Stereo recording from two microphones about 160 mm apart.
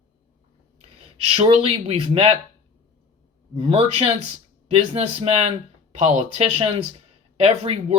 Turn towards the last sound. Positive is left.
turn(degrees=-40)  # may be behind; listen again after turning